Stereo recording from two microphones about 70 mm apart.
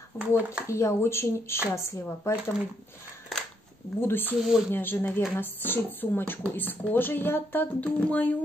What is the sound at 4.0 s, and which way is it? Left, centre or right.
Speech, left.